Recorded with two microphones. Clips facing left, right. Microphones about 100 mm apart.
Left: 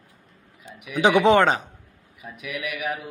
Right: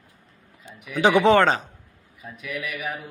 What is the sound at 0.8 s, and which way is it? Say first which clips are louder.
Speech: even; 15° left (ahead or behind).